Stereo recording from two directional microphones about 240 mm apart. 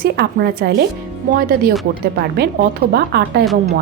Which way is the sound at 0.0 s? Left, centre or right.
Right.